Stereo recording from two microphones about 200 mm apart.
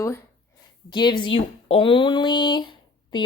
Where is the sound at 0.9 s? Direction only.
20° left (ahead or behind).